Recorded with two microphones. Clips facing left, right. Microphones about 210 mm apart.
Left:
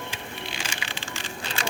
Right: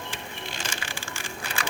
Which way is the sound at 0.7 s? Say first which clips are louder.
Left 1 dB; 20° left (ahead or behind).